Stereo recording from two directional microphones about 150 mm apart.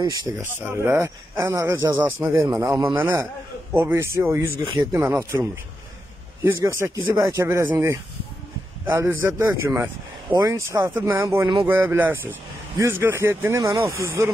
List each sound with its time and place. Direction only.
0.0 s speech: 25° right (ahead or behind)
0.4 s speech: 15° right (ahead or behind)